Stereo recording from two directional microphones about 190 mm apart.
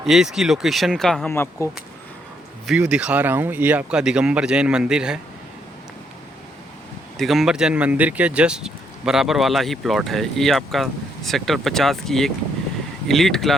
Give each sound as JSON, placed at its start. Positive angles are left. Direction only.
{"t": 0.0, "sound": "speech", "side_deg": 0}
{"t": 1.6, "sound": "speech", "side_deg": 15}
{"t": 2.6, "sound": "speech", "side_deg": -5}
{"t": 7.2, "sound": "speech", "side_deg": 0}